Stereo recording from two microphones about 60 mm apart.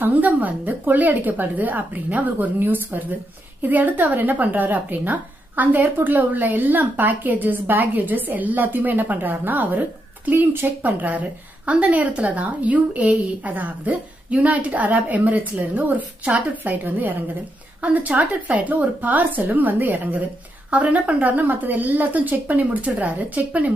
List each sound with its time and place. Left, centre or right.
0.0 s a woman's voice: right